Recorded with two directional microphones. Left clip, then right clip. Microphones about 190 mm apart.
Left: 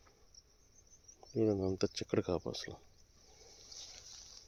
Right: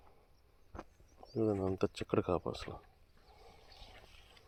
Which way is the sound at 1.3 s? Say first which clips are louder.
Left 1 dB; 10° left (ahead or behind).